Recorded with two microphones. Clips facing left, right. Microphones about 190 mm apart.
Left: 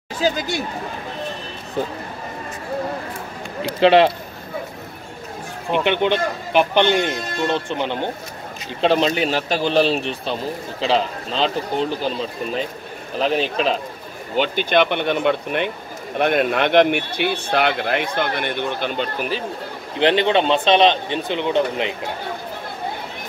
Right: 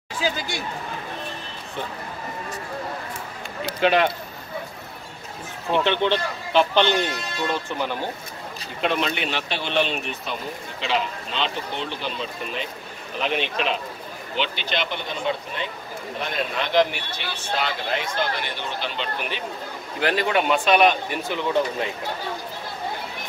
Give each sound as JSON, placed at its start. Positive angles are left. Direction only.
{"t": 3.8, "sound": "a man's voice", "side_deg": 30}
{"t": 5.7, "sound": "speech", "side_deg": 15}
{"t": 20.0, "sound": "a man's voice", "side_deg": 25}